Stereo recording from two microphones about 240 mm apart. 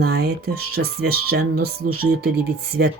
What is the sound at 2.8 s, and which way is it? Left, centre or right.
Speech, right.